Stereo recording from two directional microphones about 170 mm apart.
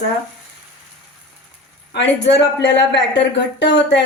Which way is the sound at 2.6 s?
90° left.